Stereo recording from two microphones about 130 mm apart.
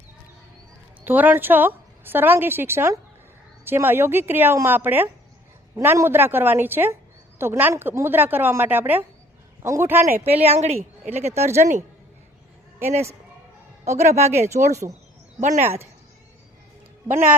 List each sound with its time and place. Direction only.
1.0 s a woman's voice: 15° right (ahead or behind)
10.4 s a woman's voice: 50° right (ahead or behind)
13.9 s a woman's voice: 60° right (ahead or behind)